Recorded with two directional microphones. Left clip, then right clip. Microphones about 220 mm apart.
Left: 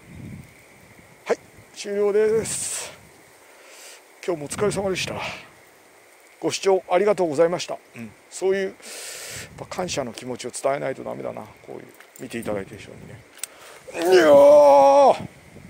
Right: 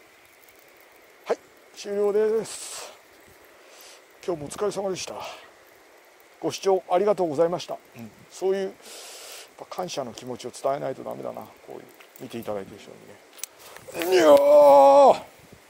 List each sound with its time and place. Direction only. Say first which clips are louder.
1.2 s a sound: left 3 dB; 15° left (ahead or behind)
4.2 s speech: left 4 dB; 15° left (ahead or behind)
13.9 s speech: left 3 dB; centre (ahead or behind)